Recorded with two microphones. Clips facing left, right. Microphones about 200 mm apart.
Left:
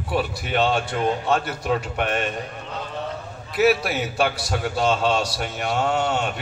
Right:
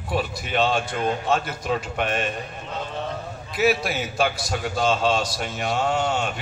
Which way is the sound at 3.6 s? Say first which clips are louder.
Left 3 dB; 65° left (ahead or behind).